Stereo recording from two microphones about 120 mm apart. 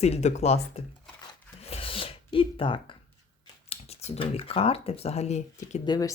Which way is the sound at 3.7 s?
60° left (ahead or behind).